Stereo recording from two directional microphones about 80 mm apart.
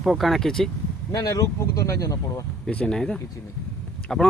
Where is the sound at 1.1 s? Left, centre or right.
Left.